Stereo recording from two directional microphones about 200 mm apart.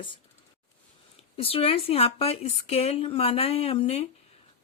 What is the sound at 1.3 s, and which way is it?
Speech, 30° left (ahead or behind).